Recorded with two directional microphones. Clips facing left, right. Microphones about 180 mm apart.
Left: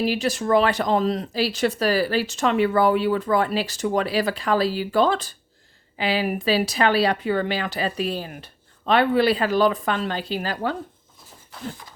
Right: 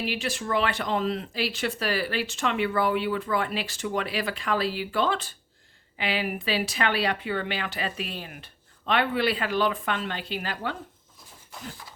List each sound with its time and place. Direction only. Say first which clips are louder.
0.0 s speech: left 7 dB; 40° left (ahead or behind)